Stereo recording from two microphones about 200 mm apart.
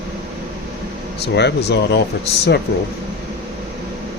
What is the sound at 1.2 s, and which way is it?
Speech, 55° left (ahead or behind).